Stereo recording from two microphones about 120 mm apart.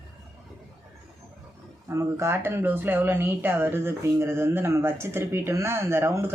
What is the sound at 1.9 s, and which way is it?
Speech, 25° right (ahead or behind).